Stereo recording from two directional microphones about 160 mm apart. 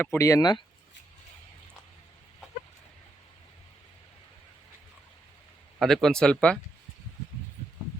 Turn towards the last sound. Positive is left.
turn(degrees=5)  # may be behind; listen again after turning